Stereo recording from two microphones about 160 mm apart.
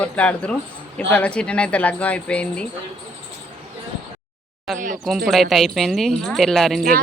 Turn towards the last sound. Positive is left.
turn(degrees=0)  # may be behind; listen again after turning